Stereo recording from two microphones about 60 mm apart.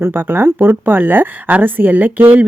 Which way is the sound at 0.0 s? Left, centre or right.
Right.